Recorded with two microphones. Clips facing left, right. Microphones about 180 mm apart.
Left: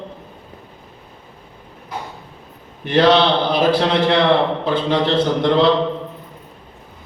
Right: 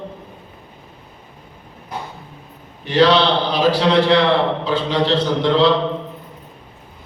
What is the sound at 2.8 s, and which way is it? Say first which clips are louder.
A man's voice: left 1 dB; 55° left (ahead or behind).